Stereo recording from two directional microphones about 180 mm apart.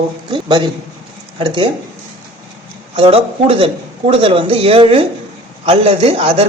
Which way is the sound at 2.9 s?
35° right (ahead or behind).